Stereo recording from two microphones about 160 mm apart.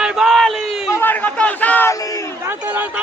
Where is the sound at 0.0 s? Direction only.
Centre (ahead or behind).